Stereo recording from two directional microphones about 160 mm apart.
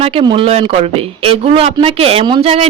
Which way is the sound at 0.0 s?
35° right (ahead or behind).